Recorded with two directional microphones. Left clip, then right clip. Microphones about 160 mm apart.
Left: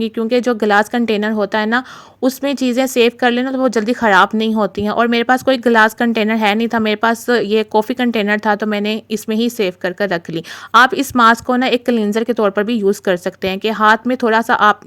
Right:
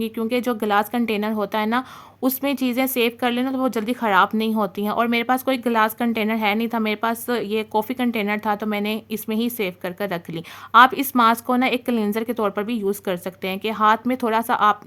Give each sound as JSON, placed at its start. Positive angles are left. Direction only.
{"t": 0.0, "sound": "speech", "side_deg": 35}